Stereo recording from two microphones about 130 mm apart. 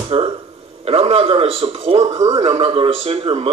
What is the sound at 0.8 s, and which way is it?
Speech, 50° right (ahead or behind).